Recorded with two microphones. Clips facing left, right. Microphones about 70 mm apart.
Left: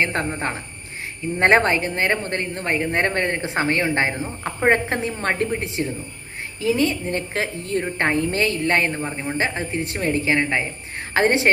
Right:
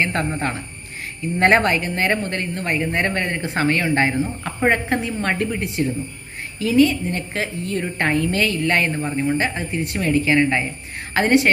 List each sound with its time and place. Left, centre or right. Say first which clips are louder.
0.0 s speech: right 1 dB; left
1.4 s a woman's voice: even; left
3.4 s speech: right 1 dB; left
4.7 s a woman's voice: even; left